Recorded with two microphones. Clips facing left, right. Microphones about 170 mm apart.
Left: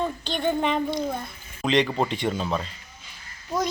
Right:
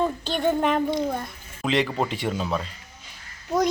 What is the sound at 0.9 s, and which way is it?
Speech, 20° right (ahead or behind).